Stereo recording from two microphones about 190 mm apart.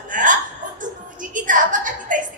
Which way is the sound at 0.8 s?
45° right (ahead or behind).